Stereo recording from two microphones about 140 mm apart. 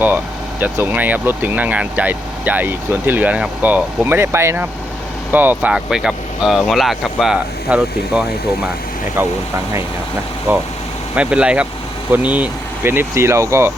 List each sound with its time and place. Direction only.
0.6 s speech: 15° right (ahead or behind)
10.5 s speech: 15° right (ahead or behind)